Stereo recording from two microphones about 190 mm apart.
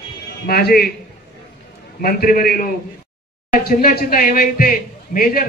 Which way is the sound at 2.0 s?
50° left (ahead or behind).